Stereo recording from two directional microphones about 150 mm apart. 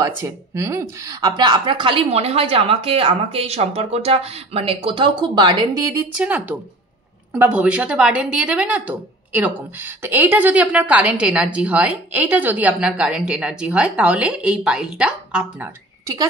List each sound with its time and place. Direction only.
0.0 s speech: 20° right (ahead or behind)
6.1 s a woman's voice: 10° right (ahead or behind)